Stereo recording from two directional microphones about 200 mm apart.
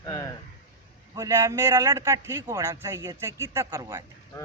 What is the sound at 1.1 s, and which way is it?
Speech, 15° right (ahead or behind).